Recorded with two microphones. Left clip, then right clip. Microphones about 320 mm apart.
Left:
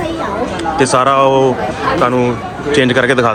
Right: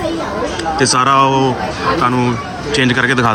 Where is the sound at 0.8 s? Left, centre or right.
Centre.